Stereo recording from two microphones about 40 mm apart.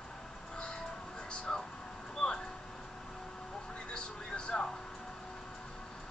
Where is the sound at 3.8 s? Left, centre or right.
Left.